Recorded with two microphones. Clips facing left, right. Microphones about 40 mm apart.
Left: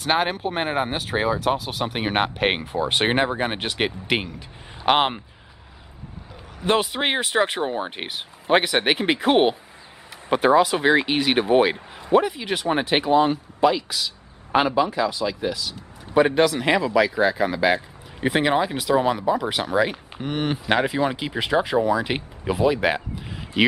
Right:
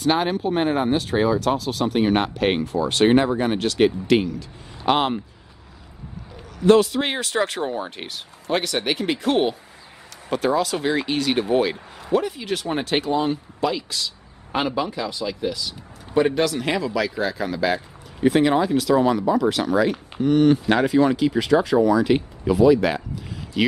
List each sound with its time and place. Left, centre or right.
0.0 s speech: centre; by 5.2 s left
6.6 s speech: left; by 16.3 s centre
16.3 s speech: centre